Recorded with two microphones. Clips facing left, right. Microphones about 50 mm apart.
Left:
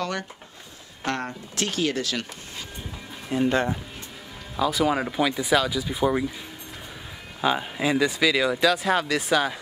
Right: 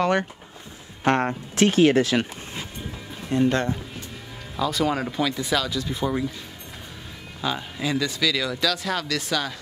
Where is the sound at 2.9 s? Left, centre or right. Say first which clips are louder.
Right 2 dB; centre.